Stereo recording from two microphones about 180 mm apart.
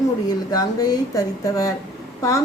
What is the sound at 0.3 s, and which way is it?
A woman's voice, 20° left (ahead or behind).